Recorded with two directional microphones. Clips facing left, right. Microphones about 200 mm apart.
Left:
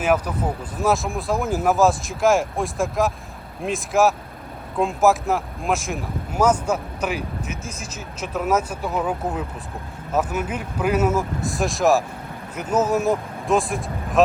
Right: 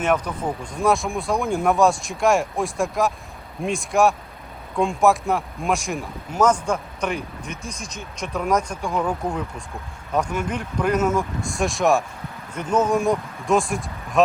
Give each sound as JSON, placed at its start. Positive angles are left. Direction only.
{"t": 0.0, "sound": "speech", "side_deg": 5}